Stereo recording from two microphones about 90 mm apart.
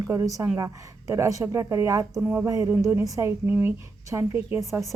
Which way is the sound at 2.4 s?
35° right (ahead or behind).